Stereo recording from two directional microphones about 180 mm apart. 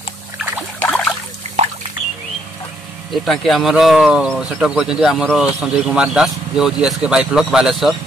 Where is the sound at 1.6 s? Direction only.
40° right (ahead or behind).